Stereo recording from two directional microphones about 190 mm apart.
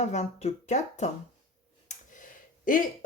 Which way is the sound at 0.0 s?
35° left (ahead or behind).